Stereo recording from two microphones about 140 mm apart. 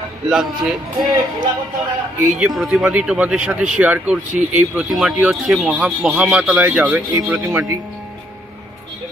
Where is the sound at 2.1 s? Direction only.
5° right (ahead or behind).